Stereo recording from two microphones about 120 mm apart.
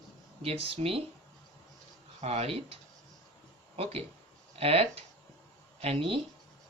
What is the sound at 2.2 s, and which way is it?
Speech, 60° right (ahead or behind).